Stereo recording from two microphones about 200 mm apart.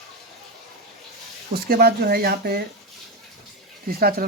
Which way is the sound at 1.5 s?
50° right (ahead or behind).